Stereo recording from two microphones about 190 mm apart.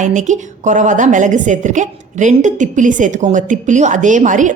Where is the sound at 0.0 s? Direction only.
40° right (ahead or behind).